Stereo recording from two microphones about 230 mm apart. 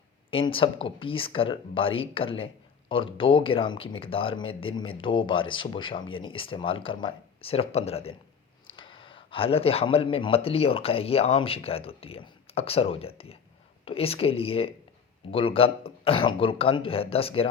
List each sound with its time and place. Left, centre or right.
0.3 s a man's voice: left